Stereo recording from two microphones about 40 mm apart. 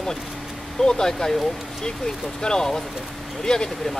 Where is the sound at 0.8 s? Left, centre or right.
Centre.